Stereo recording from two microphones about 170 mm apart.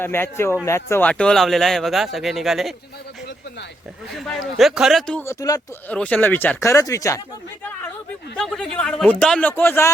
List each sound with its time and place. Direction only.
0.0 s speech: 15° left (ahead or behind)
4.2 s speech: centre (ahead or behind)
5.2 s speech: 20° left (ahead or behind)
8.4 s speech: 5° left (ahead or behind)